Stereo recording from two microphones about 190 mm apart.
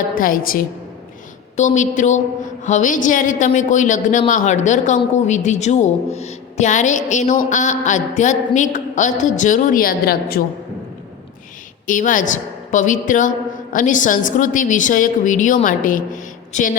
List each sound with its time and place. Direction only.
0.1 s a woman's voice: 45° left (ahead or behind)
11.9 s a woman's voice: 45° left (ahead or behind)